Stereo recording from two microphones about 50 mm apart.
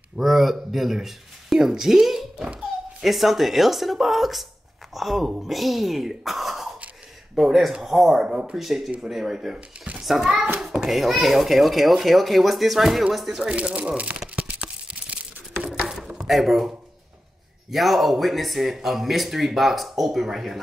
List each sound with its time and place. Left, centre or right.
0.2 s a child's voice: centre
10.6 s hands: centre
11.0 s speech: centre
13.4 s speech: centre
14.6 s a sound: right
16.3 s speech: centre